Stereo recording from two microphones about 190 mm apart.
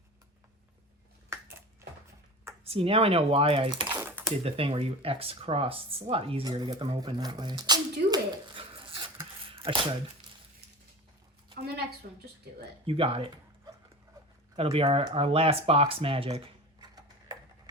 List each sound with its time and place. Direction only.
2.6 s speech: 30° right (ahead or behind)
3.9 s typewriter: 10° right (ahead or behind)
4.4 s speech: 30° right (ahead or behind)
9.5 s a sound: 30° right (ahead or behind)
12.0 s a woman's voice: 50° right (ahead or behind)
12.8 s speech: 30° right (ahead or behind)
14.5 s speech: 30° right (ahead or behind)